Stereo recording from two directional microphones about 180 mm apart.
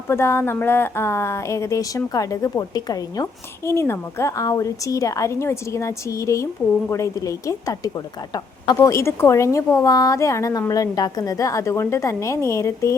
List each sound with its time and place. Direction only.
0.1 s a woman's voice: 15° left (ahead or behind)